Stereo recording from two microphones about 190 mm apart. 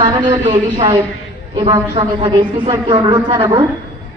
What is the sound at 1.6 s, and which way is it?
A woman's voice, 25° right (ahead or behind).